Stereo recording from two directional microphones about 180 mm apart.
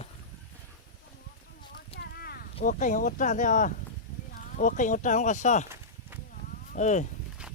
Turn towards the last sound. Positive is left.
turn(degrees=40)  # may be behind; listen again after turning